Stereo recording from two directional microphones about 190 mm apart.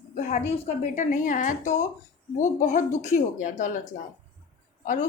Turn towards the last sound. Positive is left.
turn(degrees=45)  # may be behind; listen again after turning